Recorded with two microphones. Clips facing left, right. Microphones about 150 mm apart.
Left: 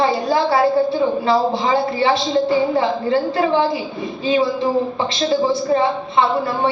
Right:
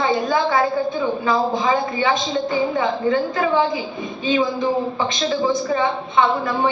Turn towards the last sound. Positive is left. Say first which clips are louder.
# left 2 dB
turn(degrees=35)  # may be behind; listen again after turning